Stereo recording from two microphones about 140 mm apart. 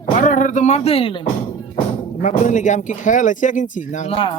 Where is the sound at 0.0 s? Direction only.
65° left (ahead or behind); by 1.2 s 40° left (ahead or behind).